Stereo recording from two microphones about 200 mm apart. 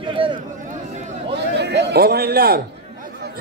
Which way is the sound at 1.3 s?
55° right (ahead or behind).